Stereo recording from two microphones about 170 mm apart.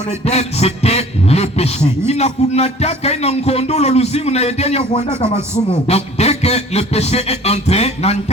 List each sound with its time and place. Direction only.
0.3 s a man's voice: 40° left (ahead or behind)